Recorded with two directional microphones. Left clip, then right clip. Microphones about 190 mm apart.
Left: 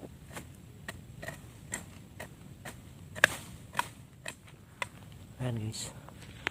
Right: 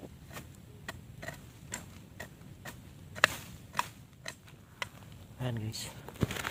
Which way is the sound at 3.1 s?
25° left (ahead or behind).